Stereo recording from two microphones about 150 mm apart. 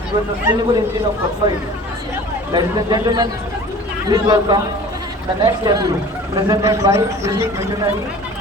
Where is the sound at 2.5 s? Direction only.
30° right (ahead or behind).